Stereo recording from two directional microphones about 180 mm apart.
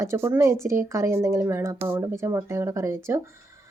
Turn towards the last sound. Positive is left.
turn(degrees=-15)  # may be behind; listen again after turning